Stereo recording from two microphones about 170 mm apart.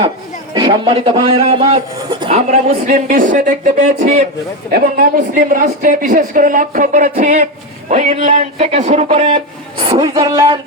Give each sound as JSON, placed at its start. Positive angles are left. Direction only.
{"t": 0.5, "sound": "speech", "side_deg": -30}
{"t": 2.6, "sound": "speech", "side_deg": -50}